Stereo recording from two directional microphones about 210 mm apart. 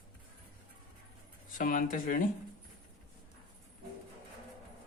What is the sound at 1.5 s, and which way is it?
Speech, 40° left (ahead or behind).